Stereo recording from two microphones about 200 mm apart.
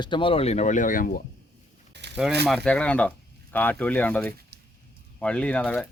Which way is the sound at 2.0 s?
60° right (ahead or behind).